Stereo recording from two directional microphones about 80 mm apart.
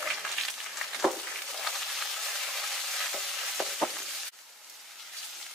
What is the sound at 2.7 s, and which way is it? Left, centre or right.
Stir, centre.